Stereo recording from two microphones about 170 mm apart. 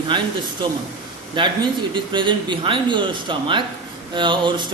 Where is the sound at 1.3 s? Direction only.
25° right (ahead or behind).